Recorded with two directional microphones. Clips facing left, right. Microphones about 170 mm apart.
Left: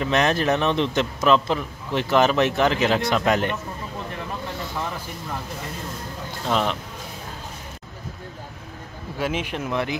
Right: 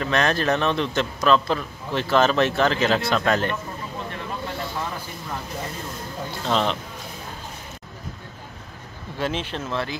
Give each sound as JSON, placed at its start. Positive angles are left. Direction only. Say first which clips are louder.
{"t": 0.0, "sound": "a man's voice", "louder": "left 1 dB", "side_deg": 20}
{"t": 6.4, "sound": "a man's voice", "louder": "even", "side_deg": 10}
{"t": 9.2, "sound": "a man's voice", "louder": "left 1 dB", "side_deg": 10}